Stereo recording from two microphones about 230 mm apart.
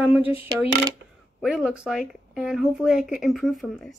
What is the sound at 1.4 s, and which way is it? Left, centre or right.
A woman's voice, centre.